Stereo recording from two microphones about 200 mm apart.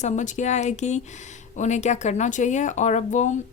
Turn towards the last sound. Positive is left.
turn(degrees=35)  # may be behind; listen again after turning